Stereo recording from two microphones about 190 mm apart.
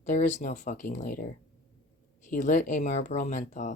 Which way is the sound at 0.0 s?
40° left (ahead or behind).